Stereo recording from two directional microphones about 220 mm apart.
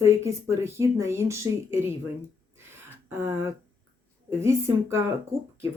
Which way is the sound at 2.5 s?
10° right (ahead or behind).